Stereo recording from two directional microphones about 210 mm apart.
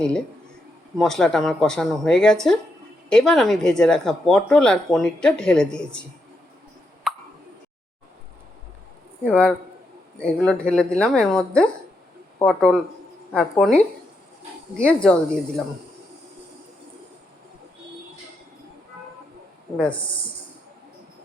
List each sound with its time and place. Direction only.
0.9 s speech: centre (ahead or behind)
9.2 s speech: 5° left (ahead or behind)
19.7 s speech: 5° left (ahead or behind)